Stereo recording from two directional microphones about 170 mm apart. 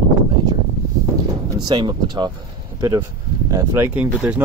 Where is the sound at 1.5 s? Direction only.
25° right (ahead or behind).